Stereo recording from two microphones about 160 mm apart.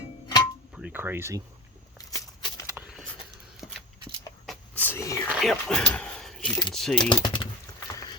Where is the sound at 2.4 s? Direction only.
25° left (ahead or behind).